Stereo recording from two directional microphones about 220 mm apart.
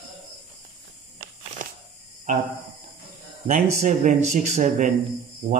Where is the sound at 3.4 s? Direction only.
35° right (ahead or behind).